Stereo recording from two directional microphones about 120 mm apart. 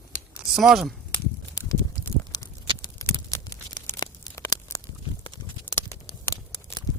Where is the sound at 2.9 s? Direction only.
25° left (ahead or behind).